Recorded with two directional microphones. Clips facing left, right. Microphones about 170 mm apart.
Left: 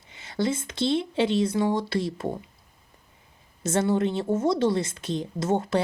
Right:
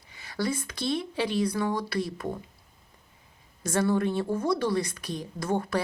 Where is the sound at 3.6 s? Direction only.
25° left (ahead or behind).